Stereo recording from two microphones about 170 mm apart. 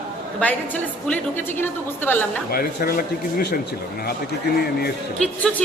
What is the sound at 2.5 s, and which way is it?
Speech, 60° left (ahead or behind).